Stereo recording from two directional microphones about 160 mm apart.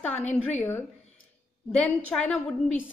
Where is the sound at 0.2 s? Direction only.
45° left (ahead or behind).